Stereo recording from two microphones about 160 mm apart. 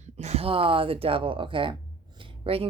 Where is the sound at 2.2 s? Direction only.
35° right (ahead or behind).